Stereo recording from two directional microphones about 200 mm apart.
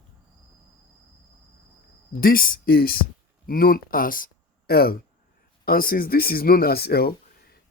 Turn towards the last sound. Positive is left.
turn(degrees=50)  # may be behind; listen again after turning